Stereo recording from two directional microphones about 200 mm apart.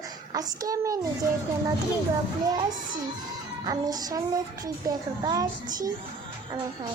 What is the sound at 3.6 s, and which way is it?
Child singing, 20° right (ahead or behind).